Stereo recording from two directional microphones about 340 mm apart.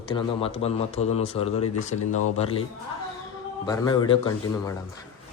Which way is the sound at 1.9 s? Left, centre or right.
Left.